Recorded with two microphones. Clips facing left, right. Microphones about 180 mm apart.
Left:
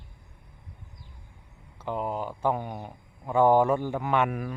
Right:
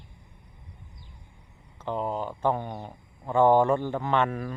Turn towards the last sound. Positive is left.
turn(degrees=10)  # may be behind; listen again after turning